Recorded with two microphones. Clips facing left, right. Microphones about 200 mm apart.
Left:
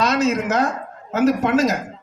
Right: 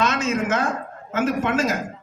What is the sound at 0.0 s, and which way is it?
A man's voice, 35° left (ahead or behind).